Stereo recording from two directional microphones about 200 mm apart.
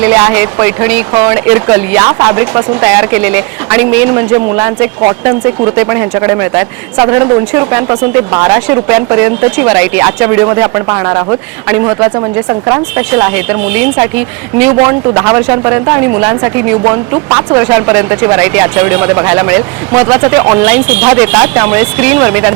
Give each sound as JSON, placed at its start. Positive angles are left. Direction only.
{"t": 0.0, "sound": "speech", "side_deg": -10}
{"t": 15.1, "sound": "speech", "side_deg": -15}